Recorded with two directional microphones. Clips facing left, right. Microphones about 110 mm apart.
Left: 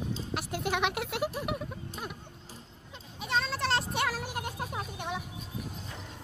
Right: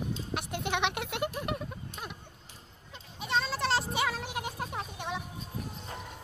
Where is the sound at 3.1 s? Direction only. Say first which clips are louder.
Even; centre (ahead or behind).